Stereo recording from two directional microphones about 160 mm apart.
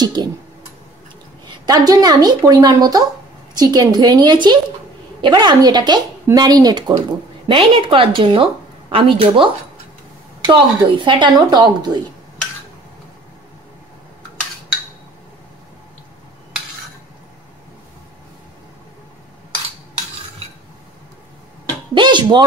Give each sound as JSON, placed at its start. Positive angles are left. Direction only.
{"t": 0.0, "sound": "speech", "side_deg": -25}
{"t": 1.5, "sound": "a woman's voice", "side_deg": -25}
{"t": 21.9, "sound": "speech", "side_deg": -30}